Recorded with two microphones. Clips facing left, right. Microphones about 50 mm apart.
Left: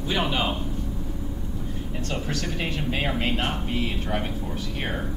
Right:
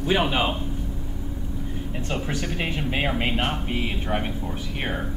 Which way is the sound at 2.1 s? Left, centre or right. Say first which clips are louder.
Right 2 dB; centre.